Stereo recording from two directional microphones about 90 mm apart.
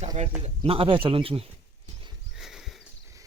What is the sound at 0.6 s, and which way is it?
Speech, 90° right.